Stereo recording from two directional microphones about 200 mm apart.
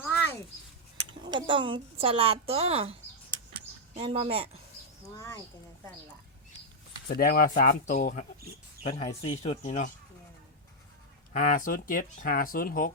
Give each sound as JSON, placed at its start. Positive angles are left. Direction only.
{"t": 0.0, "sound": "a sound", "side_deg": 10}
{"t": 0.9, "sound": "a woman's voice", "side_deg": -25}
{"t": 5.1, "sound": "speech", "side_deg": 15}
{"t": 7.1, "sound": "speech", "side_deg": 45}
{"t": 9.2, "sound": "speech", "side_deg": 35}
{"t": 11.3, "sound": "speech", "side_deg": 40}